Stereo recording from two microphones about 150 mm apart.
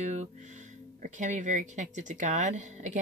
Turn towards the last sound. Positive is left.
turn(degrees=-55)  # may be behind; listen again after turning